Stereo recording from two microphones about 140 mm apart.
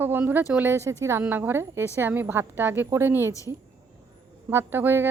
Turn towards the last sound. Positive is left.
turn(degrees=-15)  # may be behind; listen again after turning